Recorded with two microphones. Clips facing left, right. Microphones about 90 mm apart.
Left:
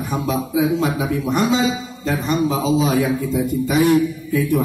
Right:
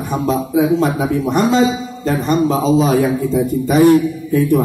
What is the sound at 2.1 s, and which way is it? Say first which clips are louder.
Speech: right 4 dB; 40° right (ahead or behind).